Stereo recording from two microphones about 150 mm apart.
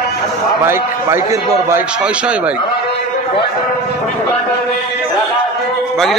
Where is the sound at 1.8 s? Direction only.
5° right (ahead or behind).